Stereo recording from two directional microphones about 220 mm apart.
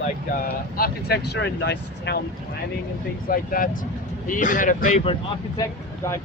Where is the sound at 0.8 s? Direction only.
45° left (ahead or behind).